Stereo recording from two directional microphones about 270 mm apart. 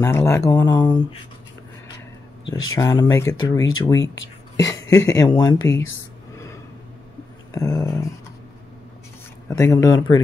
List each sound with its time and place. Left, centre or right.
0.0 s speech: centre
2.7 s speech: centre
6.3 s vehicle: centre
7.5 s speech: centre
9.5 s speech: centre